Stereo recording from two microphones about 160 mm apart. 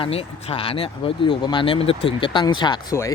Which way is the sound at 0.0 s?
40° left (ahead or behind).